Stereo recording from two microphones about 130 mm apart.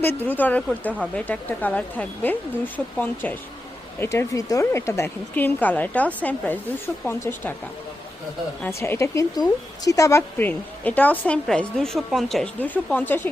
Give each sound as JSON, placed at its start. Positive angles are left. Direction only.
{"t": 0.0, "sound": "speech", "side_deg": 15}
{"t": 8.6, "sound": "speech", "side_deg": 20}
{"t": 12.5, "sound": "speech", "side_deg": 15}